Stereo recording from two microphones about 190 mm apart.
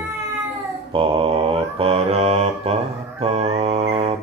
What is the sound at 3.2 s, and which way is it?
Music, 35° right (ahead or behind).